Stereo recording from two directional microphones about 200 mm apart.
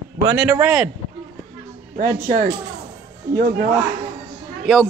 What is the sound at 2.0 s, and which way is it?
Speech, 45° right (ahead or behind).